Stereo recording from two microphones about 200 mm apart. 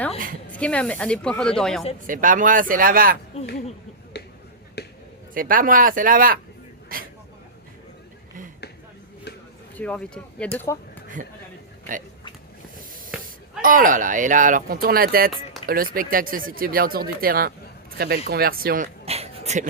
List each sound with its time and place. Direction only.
0.5 s speech: 5° left (ahead or behind)
2.0 s speech: 40° right (ahead or behind)
4.1 s finger snapping: 55° left (ahead or behind)
4.8 s a sound: 55° left (ahead or behind)
5.3 s speech: 45° right (ahead or behind)
6.8 s vehicle: 45° right (ahead or behind)
9.7 s speech: 5° left (ahead or behind)
13.1 s a sound: 5° right (ahead or behind)
13.6 s speech: 45° right (ahead or behind)
19.0 s a sound: 30° right (ahead or behind)